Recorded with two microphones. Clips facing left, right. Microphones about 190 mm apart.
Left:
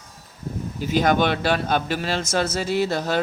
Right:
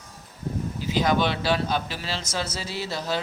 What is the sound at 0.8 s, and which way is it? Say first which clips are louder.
Speech: left 4 dB; 50° left (ahead or behind).